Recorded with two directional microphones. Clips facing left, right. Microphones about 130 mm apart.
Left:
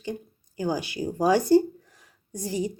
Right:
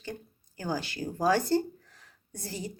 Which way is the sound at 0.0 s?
15° left (ahead or behind).